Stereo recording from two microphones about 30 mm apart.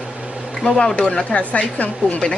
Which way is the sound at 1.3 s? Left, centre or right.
Left.